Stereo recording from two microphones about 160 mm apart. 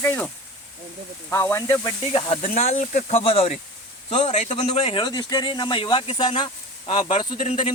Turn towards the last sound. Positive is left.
turn(degrees=45)  # may be behind; listen again after turning